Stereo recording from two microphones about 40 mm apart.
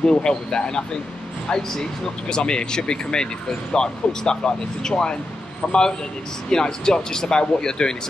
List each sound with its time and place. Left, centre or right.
0.0 s speech: centre